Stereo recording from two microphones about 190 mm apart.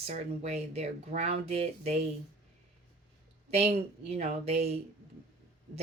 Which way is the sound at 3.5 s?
35° right (ahead or behind).